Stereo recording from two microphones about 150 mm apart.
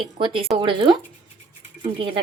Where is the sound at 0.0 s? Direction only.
35° right (ahead or behind).